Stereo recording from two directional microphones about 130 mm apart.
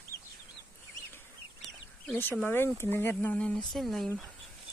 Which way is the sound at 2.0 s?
15° left (ahead or behind).